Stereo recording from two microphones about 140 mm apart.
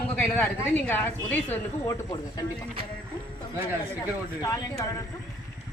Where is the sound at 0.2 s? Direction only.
10° left (ahead or behind).